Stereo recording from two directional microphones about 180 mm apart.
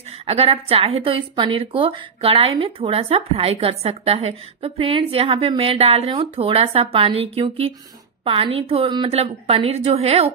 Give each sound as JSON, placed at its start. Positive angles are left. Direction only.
{"t": 0.3, "sound": "a woman's voice", "side_deg": -35}